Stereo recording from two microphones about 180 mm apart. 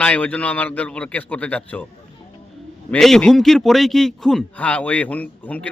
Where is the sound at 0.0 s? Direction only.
10° left (ahead or behind).